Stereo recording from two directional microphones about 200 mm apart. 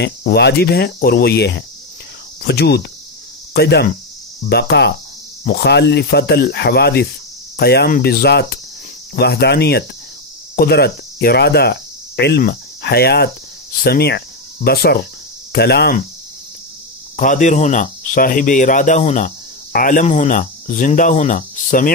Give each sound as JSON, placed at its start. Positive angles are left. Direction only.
{"t": 0.0, "sound": "speech", "side_deg": 55}
{"t": 10.5, "sound": "cricket", "side_deg": 50}
{"t": 15.5, "sound": "speech", "side_deg": 55}
{"t": 17.2, "sound": "speech", "side_deg": 40}